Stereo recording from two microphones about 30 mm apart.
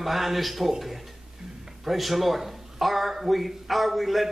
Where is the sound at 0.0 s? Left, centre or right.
Centre.